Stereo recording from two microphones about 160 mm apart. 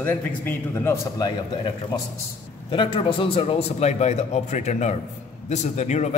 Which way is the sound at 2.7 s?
30° left (ahead or behind).